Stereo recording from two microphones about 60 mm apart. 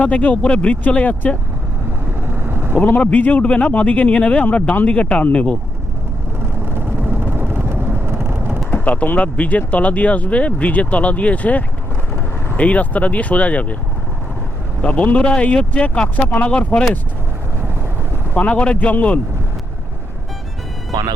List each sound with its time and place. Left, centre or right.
0.0 s speech: left
2.3 s vehicle: right
2.7 s speech: left
6.7 s vehicle: right
8.7 s speech: left
14.8 s speech: left
18.3 s speech: centre